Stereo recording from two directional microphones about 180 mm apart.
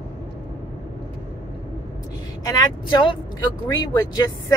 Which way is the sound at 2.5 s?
25° left (ahead or behind).